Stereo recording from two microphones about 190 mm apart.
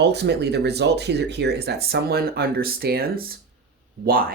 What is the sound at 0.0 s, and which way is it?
Speech, 60° right (ahead or behind).